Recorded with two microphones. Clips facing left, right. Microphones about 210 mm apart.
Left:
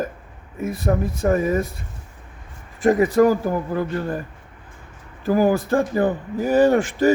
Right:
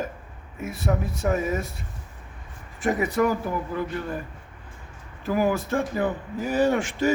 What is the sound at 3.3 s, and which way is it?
Speech, 40° left (ahead or behind).